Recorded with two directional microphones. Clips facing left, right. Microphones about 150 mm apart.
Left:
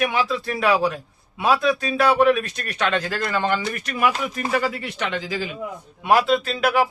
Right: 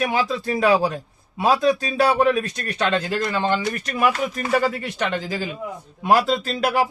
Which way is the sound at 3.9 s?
35° right (ahead or behind).